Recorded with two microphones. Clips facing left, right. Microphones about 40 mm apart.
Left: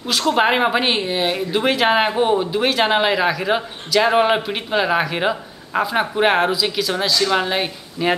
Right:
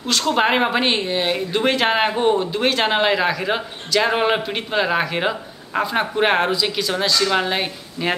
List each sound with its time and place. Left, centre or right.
0.0 s speech: centre